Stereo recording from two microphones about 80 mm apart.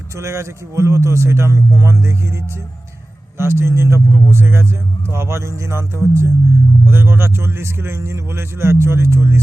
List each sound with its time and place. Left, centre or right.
0.2 s a man's voice: right